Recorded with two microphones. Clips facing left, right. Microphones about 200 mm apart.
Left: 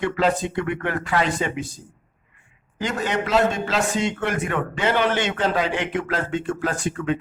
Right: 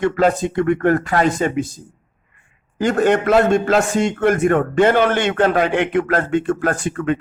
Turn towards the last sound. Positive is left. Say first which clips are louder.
# right 4 dB
turn(degrees=-55)  # may be behind; listen again after turning